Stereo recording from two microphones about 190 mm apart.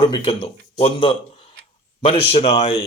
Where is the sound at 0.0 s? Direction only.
30° left (ahead or behind).